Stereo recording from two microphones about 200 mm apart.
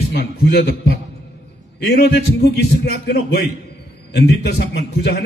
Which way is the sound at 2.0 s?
55° left (ahead or behind).